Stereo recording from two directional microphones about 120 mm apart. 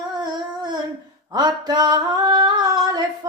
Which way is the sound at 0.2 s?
35° right (ahead or behind).